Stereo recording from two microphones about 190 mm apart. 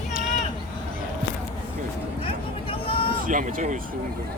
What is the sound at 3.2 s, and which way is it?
Speech, 45° right (ahead or behind).